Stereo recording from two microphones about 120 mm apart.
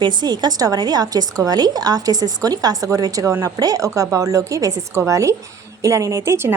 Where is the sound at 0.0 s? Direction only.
35° right (ahead or behind).